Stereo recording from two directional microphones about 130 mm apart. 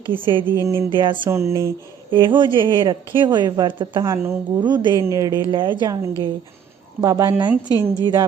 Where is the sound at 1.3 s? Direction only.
20° right (ahead or behind).